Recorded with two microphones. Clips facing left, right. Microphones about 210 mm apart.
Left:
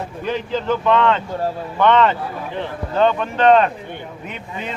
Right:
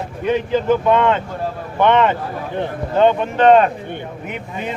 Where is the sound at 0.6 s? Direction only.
15° right (ahead or behind).